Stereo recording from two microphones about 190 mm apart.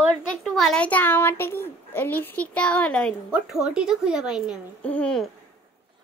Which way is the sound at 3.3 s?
5° right (ahead or behind).